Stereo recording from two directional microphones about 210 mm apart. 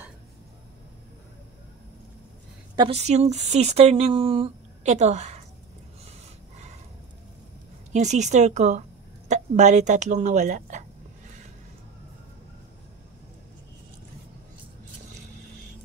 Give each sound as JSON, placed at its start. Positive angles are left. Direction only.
{"t": 2.7, "sound": "speech", "side_deg": -20}
{"t": 3.0, "sound": "speech", "side_deg": -30}
{"t": 7.9, "sound": "speech", "side_deg": -35}